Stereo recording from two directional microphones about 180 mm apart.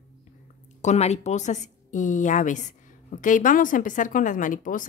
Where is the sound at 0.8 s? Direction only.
40° left (ahead or behind).